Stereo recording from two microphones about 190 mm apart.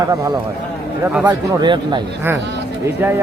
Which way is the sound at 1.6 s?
25° right (ahead or behind).